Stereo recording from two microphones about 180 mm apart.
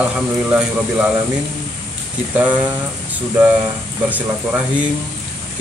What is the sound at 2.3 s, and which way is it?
Speech, 10° right (ahead or behind).